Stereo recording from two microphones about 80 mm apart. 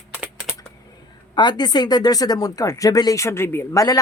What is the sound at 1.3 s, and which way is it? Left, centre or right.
Speech, left.